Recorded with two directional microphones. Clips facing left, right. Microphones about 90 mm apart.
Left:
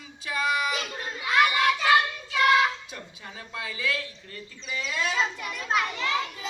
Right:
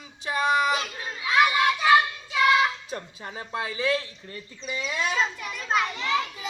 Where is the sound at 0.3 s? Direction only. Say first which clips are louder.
Right 4 dB; 30° right (ahead or behind).